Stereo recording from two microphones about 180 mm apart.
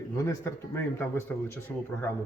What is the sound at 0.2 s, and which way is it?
Speech, 15° left (ahead or behind).